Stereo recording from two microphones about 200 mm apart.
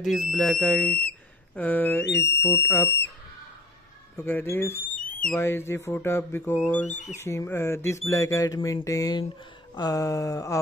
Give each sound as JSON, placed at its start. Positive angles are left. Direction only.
{"t": 0.0, "sound": "speech", "side_deg": 0}
{"t": 4.2, "sound": "speech", "side_deg": 10}
{"t": 6.8, "sound": "speech", "side_deg": 35}
{"t": 7.2, "sound": "speech", "side_deg": 15}